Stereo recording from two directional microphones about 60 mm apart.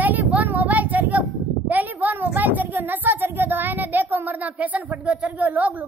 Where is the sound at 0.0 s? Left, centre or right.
Right.